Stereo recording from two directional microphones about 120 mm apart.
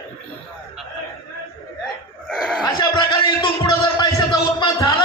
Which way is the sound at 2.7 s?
45° left (ahead or behind).